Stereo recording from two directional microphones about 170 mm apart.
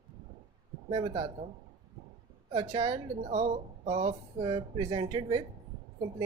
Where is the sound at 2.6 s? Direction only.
25° right (ahead or behind).